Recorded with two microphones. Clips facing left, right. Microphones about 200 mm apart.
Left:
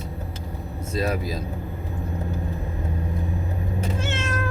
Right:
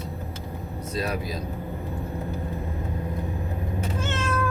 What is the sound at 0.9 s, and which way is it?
Speech, 25° left (ahead or behind).